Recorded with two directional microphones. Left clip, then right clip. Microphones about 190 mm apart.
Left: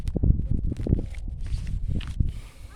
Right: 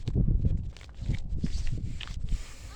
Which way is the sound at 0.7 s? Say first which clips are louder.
Left 11 dB; 10° left (ahead or behind).